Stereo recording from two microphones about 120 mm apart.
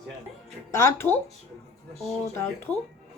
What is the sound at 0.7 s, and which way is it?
Speech, 25° left (ahead or behind).